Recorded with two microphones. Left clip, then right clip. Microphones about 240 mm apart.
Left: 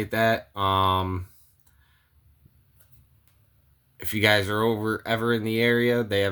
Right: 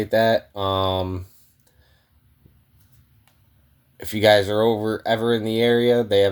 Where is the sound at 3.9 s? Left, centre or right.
Left.